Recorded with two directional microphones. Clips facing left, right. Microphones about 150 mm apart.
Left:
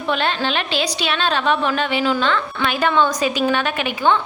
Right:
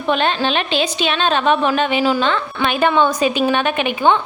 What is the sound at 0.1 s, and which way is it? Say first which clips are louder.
A woman's voice: right 3 dB; 20° right (ahead or behind).